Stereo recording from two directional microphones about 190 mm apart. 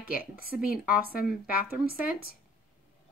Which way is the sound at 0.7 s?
50° left (ahead or behind).